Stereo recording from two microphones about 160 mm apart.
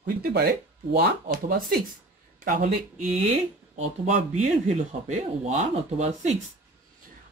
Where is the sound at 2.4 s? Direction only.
55° right (ahead or behind).